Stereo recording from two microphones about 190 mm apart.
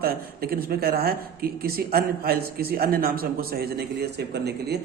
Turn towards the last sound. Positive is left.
turn(degrees=-60)  # may be behind; listen again after turning